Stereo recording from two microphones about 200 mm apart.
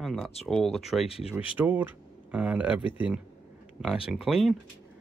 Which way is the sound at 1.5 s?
10° right (ahead or behind).